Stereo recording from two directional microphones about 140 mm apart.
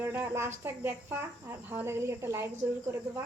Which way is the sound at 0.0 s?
15° right (ahead or behind).